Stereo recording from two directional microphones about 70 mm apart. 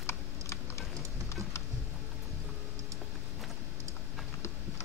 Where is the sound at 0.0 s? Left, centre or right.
Left.